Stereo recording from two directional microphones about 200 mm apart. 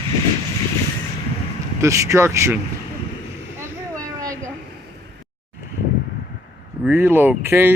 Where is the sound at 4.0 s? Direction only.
15° right (ahead or behind).